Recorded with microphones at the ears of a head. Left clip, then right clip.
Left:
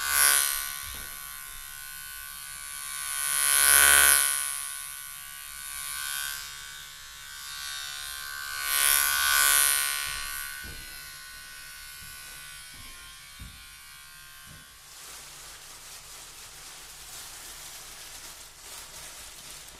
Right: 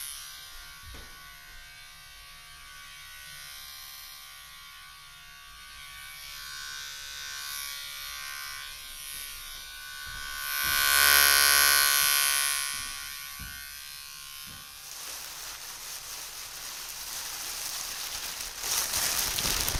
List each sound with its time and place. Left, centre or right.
0.0 s electric shaver: left
3.1 s electric shaver: left
6.0 s electric shaver: left
8.5 s electric shaver: left
10.5 s electric shaver: right
17.2 s a sound: right